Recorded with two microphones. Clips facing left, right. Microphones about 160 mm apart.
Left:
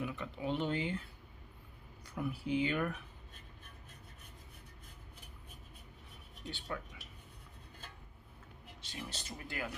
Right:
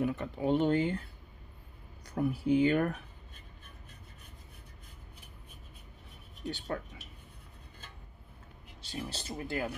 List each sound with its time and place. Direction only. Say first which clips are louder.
0.0 s speech: right 8 dB; 45° right (ahead or behind)
2.0 s speech: right 8 dB; 40° right (ahead or behind)
8.8 s speech: right 6 dB; 35° right (ahead or behind)